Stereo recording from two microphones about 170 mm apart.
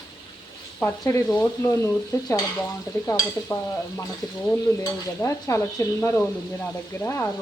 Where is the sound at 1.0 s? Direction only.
15° left (ahead or behind).